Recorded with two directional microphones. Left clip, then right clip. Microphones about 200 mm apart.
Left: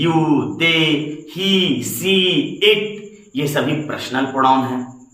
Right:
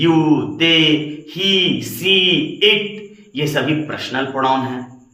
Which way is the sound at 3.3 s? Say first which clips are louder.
Right 1 dB; 20° right (ahead or behind).